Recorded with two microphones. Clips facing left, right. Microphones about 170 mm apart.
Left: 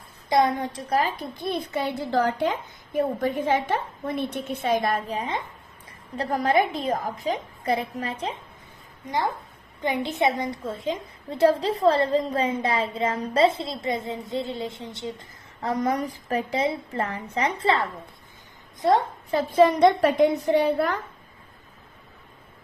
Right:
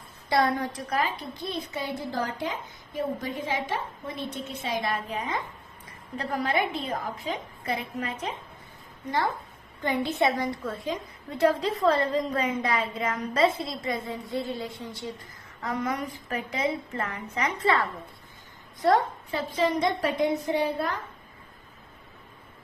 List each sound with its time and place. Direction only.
0.3 s a woman's voice: 20° left (ahead or behind); by 1.2 s 35° left (ahead or behind)
1.5 s a woman's voice: 60° left (ahead or behind); by 8.4 s 30° left (ahead or behind)
9.8 s a woman's voice: 20° left (ahead or behind)
15.6 s a woman's voice: 35° left (ahead or behind); by 19.0 s 20° left (ahead or behind)
19.3 s a woman's voice: 50° left (ahead or behind)